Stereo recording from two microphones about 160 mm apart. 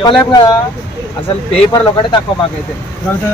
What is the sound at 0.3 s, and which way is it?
Speech, 25° left (ahead or behind).